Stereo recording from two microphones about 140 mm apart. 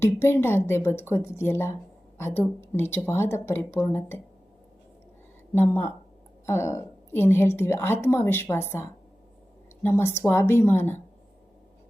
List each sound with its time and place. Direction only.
0.0 s a woman's voice: 15° left (ahead or behind)
5.5 s a woman's voice: 15° left (ahead or behind)